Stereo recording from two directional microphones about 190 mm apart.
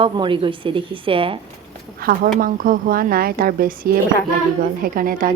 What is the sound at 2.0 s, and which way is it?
Speech, 50° right (ahead or behind).